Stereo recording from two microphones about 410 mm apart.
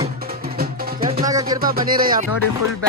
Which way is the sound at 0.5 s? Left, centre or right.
Centre.